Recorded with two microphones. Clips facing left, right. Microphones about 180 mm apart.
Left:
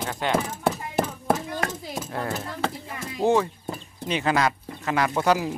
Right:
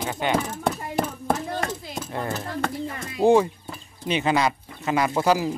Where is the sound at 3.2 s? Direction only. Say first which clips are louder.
Right 4 dB; 15° right (ahead or behind).